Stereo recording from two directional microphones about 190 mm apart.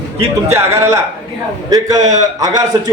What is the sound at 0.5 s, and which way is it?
A man's voice, 15° right (ahead or behind).